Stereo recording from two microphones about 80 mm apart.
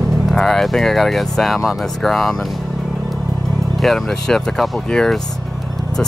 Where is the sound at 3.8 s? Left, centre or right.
Centre.